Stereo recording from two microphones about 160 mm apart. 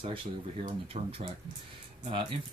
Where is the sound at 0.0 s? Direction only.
35° right (ahead or behind).